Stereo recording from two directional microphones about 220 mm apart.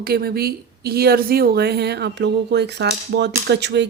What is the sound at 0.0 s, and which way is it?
Speech, 45° right (ahead or behind).